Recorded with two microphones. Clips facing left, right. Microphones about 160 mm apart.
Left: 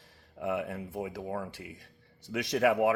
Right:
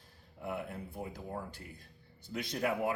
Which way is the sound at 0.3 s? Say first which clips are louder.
Left 7 dB; 90° left.